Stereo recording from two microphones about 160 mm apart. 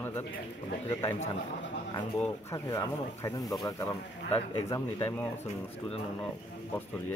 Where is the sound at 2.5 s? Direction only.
20° left (ahead or behind).